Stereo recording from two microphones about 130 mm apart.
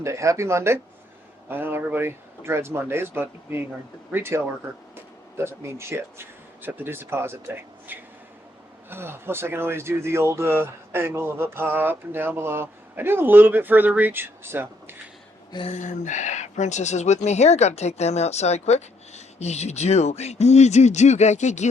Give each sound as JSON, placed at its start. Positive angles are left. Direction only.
{"t": 0.0, "sound": "speech", "side_deg": -25}
{"t": 15.7, "sound": "speech", "side_deg": 70}